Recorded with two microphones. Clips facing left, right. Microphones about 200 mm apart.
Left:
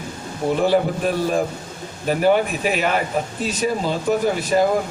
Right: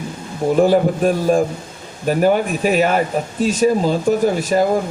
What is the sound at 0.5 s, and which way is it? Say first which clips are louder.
Speech: right 5 dB; 45° right (ahead or behind).